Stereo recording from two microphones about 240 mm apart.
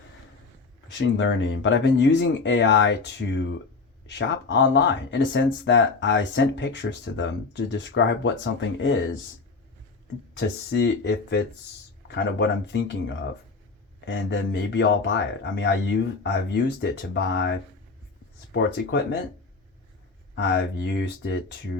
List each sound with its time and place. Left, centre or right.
0.9 s speech: left
10.3 s speech: left
20.3 s speech: left